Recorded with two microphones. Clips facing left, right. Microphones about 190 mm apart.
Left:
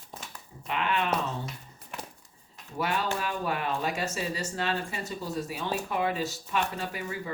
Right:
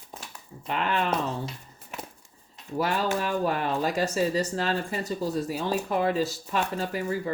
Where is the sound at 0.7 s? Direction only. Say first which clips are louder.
Right 2 dB; 40° right (ahead or behind).